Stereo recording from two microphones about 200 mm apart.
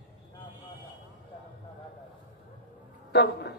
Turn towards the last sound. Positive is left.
turn(degrees=55)  # may be behind; listen again after turning